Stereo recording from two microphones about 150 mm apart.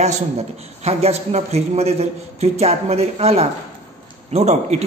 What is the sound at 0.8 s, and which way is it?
Speech, 45° right (ahead or behind).